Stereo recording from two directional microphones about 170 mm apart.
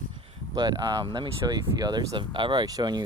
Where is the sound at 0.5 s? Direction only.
25° right (ahead or behind).